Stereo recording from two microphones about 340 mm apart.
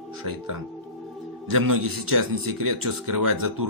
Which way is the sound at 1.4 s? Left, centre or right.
Right.